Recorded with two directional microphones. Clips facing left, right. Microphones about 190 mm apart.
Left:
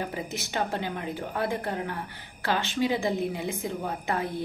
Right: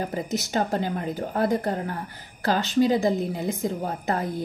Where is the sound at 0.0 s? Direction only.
40° right (ahead or behind).